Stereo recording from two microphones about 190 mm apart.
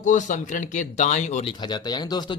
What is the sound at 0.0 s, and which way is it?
Speech, 40° left (ahead or behind).